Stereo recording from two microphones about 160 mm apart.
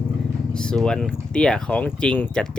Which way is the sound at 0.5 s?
5° left (ahead or behind).